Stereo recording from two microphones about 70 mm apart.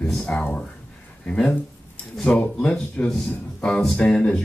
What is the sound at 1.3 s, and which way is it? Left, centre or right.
A man's voice, centre.